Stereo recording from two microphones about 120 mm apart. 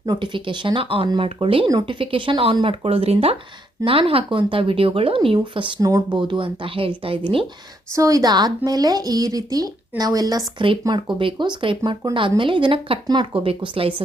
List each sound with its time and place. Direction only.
0.0 s speech: 40° right (ahead or behind)
5.8 s speech: 30° right (ahead or behind)
6.1 s speech: 40° right (ahead or behind)
7.9 s speech: 30° right (ahead or behind); by 13.9 s 50° right (ahead or behind)